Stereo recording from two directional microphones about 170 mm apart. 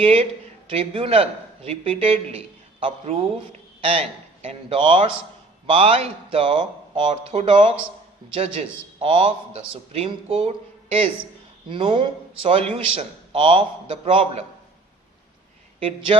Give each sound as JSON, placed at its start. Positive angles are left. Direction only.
{"t": 0.0, "sound": "a man's voice", "side_deg": -35}
{"t": 11.7, "sound": "a man's voice", "side_deg": -30}